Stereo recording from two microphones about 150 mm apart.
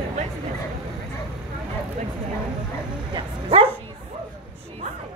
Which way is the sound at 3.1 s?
35° right (ahead or behind).